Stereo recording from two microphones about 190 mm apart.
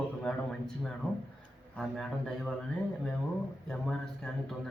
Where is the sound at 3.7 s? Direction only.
5° left (ahead or behind).